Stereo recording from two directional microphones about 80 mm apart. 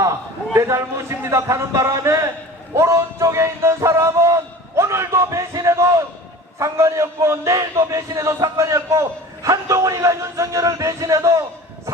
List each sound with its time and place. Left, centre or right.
0.5 s a man's voice: right
2.7 s music: right
6.6 s a man's voice: right